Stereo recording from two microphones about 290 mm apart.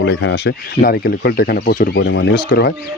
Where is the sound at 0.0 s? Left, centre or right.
Left.